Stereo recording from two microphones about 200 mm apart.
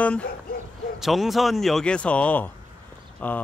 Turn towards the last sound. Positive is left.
turn(degrees=10)  # may be behind; listen again after turning